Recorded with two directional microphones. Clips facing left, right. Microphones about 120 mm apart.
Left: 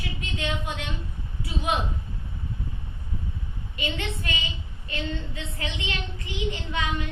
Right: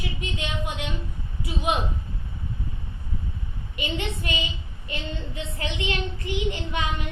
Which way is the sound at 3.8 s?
20° right (ahead or behind).